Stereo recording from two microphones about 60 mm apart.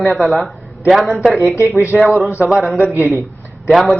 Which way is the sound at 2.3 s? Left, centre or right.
Right.